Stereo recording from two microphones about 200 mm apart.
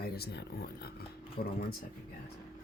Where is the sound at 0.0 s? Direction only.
55° left (ahead or behind).